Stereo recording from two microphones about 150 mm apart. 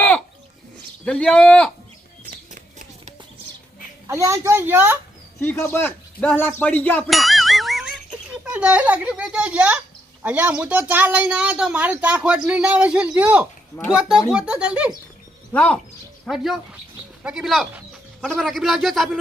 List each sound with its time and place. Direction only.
1.0 s a man's voice: 5° left (ahead or behind)
4.0 s speech: 20° right (ahead or behind)
5.4 s a man's voice: 15° left (ahead or behind)
7.1 s a sound: centre (ahead or behind)
8.4 s speech: 10° right (ahead or behind)
15.5 s speech: 5° left (ahead or behind)